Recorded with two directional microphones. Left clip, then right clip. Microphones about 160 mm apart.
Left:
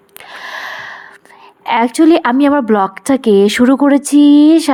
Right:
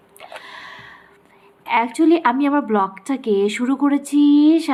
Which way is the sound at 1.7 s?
55° left (ahead or behind).